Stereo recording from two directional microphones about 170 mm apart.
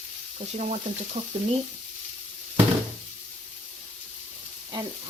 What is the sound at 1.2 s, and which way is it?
Frying, 45° right (ahead or behind).